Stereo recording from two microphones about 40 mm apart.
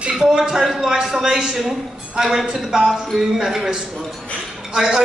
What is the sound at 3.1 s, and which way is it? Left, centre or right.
A man's voice, centre.